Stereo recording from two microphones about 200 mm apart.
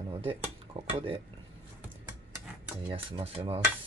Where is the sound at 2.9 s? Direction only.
30° right (ahead or behind).